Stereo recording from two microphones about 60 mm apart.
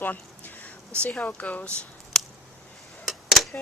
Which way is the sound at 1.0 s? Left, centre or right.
Centre.